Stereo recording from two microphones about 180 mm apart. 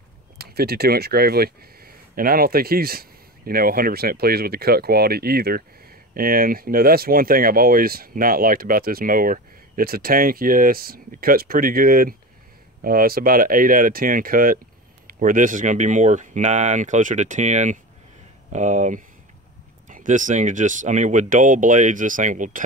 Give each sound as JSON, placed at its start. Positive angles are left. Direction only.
{"t": 0.4, "sound": "speech", "side_deg": -60}